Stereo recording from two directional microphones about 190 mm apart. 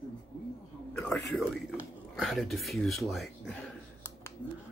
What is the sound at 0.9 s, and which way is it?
Speech, 5° left (ahead or behind).